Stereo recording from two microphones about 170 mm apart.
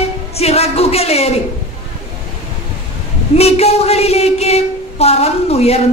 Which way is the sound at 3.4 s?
35° left (ahead or behind).